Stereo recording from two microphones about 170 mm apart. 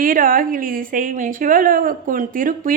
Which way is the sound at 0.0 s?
55° right (ahead or behind).